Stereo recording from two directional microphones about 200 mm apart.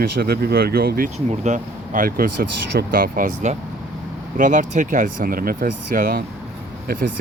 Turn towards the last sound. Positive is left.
turn(degrees=-45)  # may be behind; listen again after turning